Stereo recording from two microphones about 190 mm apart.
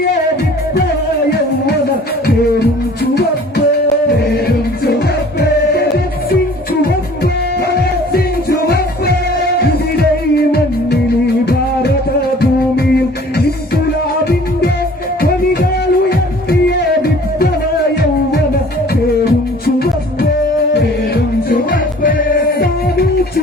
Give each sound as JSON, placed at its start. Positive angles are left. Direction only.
{"t": 4.4, "sound": "music", "side_deg": 55}
{"t": 7.7, "sound": "music", "side_deg": 55}
{"t": 12.4, "sound": "music", "side_deg": 55}
{"t": 19.6, "sound": "music", "side_deg": 55}
{"t": 21.5, "sound": "music", "side_deg": 45}